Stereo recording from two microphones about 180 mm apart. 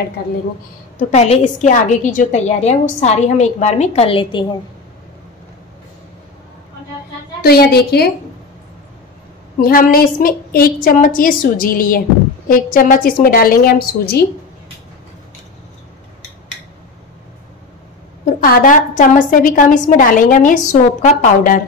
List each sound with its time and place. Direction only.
0.9 s a woman's voice: 40° left (ahead or behind)
7.4 s a woman's voice: 60° left (ahead or behind)
9.6 s a woman's voice: 55° left (ahead or behind)
18.4 s a woman's voice: 50° left (ahead or behind)